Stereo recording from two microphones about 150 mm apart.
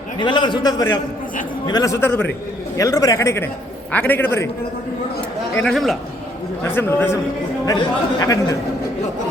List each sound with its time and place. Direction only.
0.2 s a man's voice: 30° left (ahead or behind); by 4.4 s 15° left (ahead or behind)
5.5 s a man's voice: 5° left (ahead or behind)
6.7 s a man's voice: 15° left (ahead or behind)